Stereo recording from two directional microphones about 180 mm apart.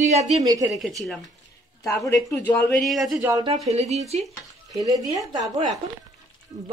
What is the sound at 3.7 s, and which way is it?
Speech, 35° right (ahead or behind).